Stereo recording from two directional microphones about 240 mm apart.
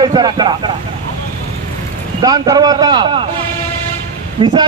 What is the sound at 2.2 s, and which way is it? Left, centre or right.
A man's voice, centre.